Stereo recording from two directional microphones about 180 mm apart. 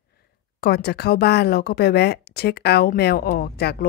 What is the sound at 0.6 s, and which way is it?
Speech, 60° left (ahead or behind).